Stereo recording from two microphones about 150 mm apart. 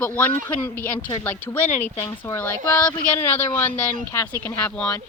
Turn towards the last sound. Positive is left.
turn(degrees=5)  # may be behind; listen again after turning